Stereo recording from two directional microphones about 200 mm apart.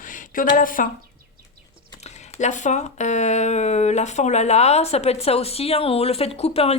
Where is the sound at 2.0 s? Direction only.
35° left (ahead or behind).